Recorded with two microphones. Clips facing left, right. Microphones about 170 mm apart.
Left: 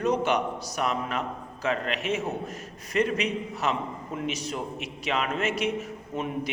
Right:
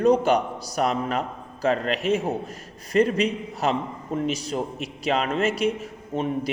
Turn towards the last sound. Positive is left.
turn(degrees=-30)  # may be behind; listen again after turning